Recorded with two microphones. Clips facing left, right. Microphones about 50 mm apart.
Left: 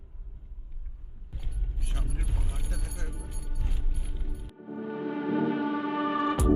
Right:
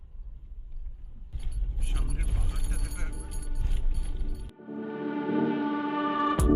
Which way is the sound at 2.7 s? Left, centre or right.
Right.